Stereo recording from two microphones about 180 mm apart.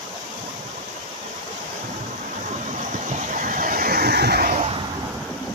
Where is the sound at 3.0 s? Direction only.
45° right (ahead or behind).